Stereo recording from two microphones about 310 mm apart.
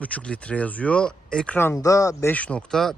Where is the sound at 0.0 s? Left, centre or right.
Centre.